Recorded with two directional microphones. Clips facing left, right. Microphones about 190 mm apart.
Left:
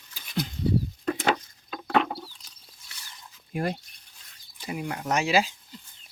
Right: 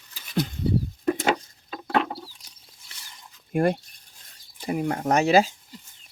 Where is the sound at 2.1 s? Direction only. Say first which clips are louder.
Even; 10° right (ahead or behind).